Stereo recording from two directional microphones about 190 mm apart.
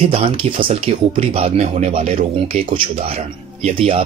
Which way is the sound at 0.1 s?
30° right (ahead or behind).